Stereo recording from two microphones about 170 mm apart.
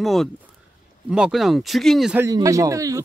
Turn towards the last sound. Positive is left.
turn(degrees=-20)  # may be behind; listen again after turning